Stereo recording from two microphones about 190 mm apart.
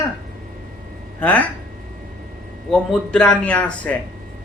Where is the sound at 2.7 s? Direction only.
5° left (ahead or behind).